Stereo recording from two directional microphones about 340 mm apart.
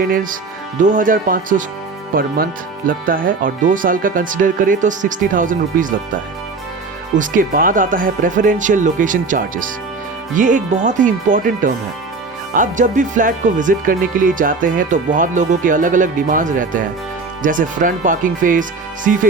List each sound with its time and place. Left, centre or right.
0.0 s speech: right
7.2 s speech: right